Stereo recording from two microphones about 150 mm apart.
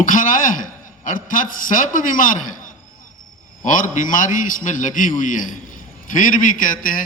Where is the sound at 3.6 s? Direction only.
60° left (ahead or behind).